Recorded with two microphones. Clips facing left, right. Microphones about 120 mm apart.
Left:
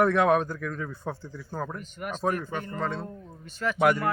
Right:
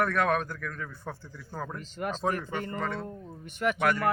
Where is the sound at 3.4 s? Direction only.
20° right (ahead or behind).